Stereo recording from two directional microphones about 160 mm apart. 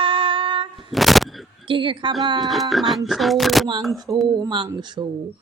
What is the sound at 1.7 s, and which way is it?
Speech, 30° right (ahead or behind).